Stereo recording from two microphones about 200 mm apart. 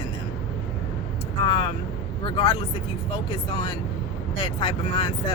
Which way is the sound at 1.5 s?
25° left (ahead or behind).